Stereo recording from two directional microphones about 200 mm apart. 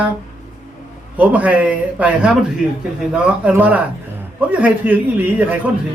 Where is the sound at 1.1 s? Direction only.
5° right (ahead or behind).